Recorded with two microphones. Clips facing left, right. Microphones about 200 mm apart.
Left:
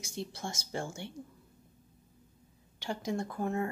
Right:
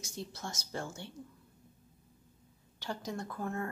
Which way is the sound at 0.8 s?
25° left (ahead or behind).